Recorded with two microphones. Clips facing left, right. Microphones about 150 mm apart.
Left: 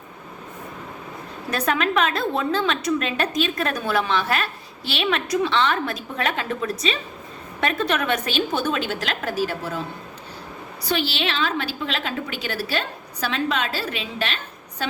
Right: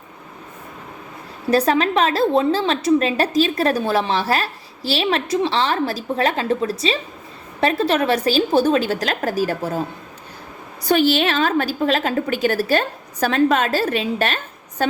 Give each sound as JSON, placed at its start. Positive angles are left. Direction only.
{"t": 1.5, "sound": "a woman's voice", "side_deg": -35}
{"t": 10.8, "sound": "a woman's voice", "side_deg": -45}